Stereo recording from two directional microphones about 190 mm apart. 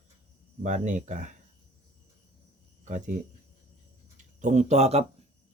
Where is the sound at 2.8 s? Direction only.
40° right (ahead or behind).